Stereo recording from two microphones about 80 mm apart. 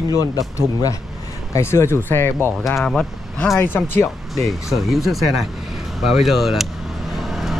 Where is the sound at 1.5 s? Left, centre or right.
Left.